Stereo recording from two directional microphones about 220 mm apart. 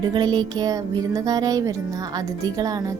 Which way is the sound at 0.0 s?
20° right (ahead or behind).